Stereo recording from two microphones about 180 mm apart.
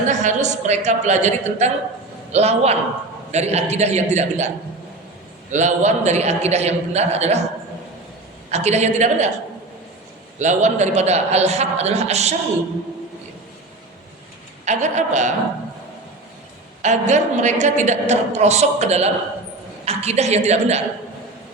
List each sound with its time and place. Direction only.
0.0 s a woman's voice: 40° right (ahead or behind)
8.4 s a woman's voice: 40° right (ahead or behind)
10.3 s a woman's voice: 40° right (ahead or behind)
14.6 s a woman's voice: 40° right (ahead or behind)
16.8 s a woman's voice: 40° right (ahead or behind)